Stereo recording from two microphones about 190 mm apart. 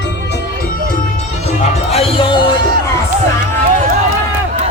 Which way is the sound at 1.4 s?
35° left (ahead or behind).